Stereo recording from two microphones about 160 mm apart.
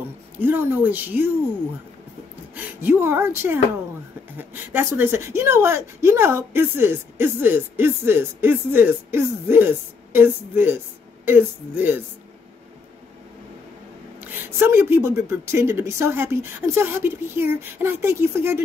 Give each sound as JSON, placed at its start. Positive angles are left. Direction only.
{"t": 0.4, "sound": "speech", "side_deg": -15}
{"t": 2.5, "sound": "speech", "side_deg": -15}
{"t": 14.2, "sound": "speech", "side_deg": -15}